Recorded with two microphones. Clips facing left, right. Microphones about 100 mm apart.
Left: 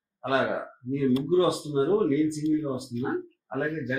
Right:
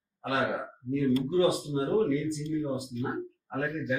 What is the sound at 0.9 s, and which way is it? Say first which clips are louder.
Speech: left 3 dB; 20° left (ahead or behind).